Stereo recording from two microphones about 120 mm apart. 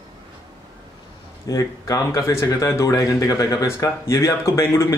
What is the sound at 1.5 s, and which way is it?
Speech, 30° left (ahead or behind).